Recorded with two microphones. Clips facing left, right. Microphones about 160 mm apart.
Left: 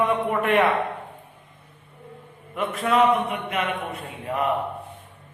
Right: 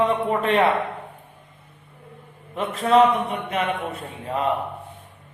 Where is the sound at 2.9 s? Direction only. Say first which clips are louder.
Right 3 dB; 35° right (ahead or behind).